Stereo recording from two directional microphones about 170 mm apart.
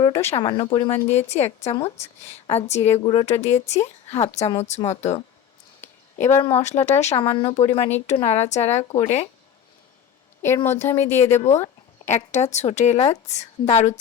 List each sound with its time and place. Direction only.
0.0 s speech: 20° left (ahead or behind)
0.3 s a woman's voice: 30° left (ahead or behind)
3.0 s speech: 30° left (ahead or behind)
3.2 s a woman's voice: 40° left (ahead or behind)
5.8 s a sound: 15° left (ahead or behind)
6.4 s a woman's voice: 40° left (ahead or behind)
10.4 s speech: 15° left (ahead or behind)
12.0 s a woman's voice: 45° left (ahead or behind)